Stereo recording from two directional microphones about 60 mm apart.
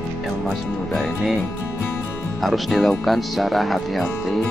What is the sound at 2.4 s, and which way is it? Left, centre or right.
Speech, centre.